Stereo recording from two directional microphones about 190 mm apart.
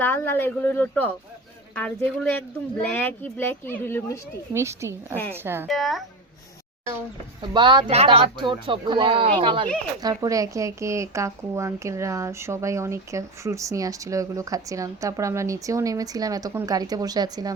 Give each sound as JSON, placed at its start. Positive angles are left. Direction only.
{"t": 0.0, "sound": "speech", "side_deg": 10}
{"t": 4.5, "sound": "a woman's voice", "side_deg": -15}
{"t": 5.6, "sound": "speech", "side_deg": 0}
{"t": 7.5, "sound": "a woman's voice", "side_deg": -25}